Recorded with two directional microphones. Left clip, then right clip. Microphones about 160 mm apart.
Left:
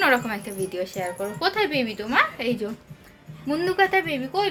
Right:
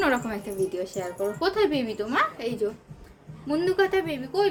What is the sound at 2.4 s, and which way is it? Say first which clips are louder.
A woman's voice: left 1 dB; 25° left (ahead or behind).